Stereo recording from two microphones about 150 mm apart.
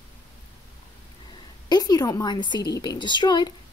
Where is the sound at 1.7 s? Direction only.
25° left (ahead or behind).